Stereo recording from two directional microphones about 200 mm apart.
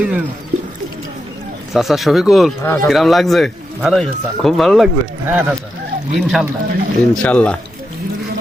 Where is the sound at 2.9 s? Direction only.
Centre (ahead or behind).